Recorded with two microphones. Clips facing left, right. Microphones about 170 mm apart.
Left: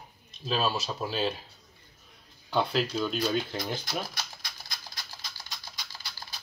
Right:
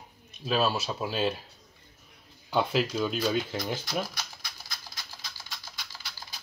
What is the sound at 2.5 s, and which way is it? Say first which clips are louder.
Speech: right 1 dB; 10° right (ahead or behind).